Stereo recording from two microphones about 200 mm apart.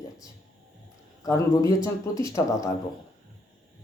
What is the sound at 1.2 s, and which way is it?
Speech, 15° left (ahead or behind).